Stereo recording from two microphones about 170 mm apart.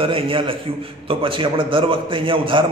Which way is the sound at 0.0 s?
30° right (ahead or behind).